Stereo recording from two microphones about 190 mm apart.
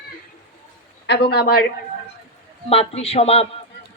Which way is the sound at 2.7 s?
30° left (ahead or behind).